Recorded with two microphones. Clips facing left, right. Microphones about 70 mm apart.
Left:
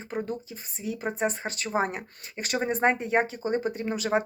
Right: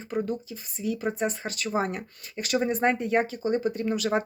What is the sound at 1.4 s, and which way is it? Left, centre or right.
Speech, left.